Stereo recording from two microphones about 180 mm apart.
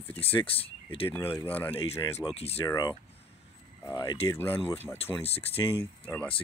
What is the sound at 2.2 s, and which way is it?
Speech, 35° left (ahead or behind).